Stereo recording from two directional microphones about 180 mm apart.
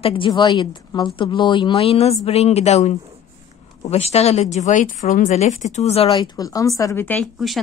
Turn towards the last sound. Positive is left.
turn(degrees=0)  # may be behind; listen again after turning